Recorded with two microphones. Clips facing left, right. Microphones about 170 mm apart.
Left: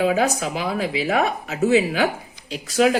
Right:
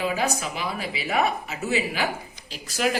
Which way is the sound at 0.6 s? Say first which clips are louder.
Left 7 dB; 90° left.